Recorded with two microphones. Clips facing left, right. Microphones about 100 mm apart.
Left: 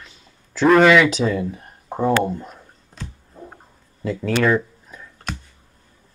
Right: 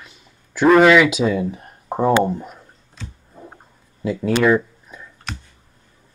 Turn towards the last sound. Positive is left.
turn(degrees=-10)  # may be behind; listen again after turning